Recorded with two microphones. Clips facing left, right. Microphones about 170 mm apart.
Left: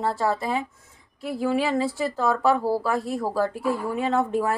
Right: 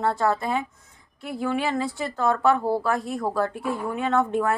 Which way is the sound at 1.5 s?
30° left (ahead or behind).